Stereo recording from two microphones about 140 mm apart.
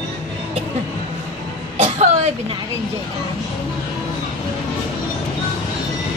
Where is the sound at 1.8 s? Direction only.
55° right (ahead or behind).